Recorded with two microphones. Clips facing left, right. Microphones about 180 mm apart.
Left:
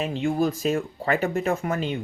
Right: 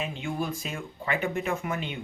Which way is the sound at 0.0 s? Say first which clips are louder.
Left 8 dB; 40° left (ahead or behind).